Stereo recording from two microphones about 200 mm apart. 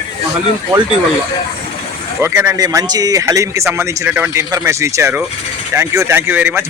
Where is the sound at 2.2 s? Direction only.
10° right (ahead or behind).